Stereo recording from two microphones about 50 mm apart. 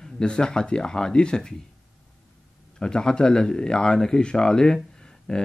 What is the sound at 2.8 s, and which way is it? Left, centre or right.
Speech, centre.